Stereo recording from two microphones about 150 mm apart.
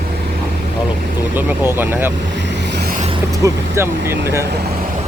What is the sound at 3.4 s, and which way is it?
Speech, 15° right (ahead or behind).